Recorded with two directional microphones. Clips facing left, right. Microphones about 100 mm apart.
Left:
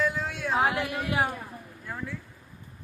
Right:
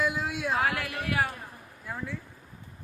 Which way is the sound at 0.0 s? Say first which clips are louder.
Even; 5° right (ahead or behind).